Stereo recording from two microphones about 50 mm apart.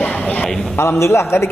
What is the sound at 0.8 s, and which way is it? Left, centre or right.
Speech, left.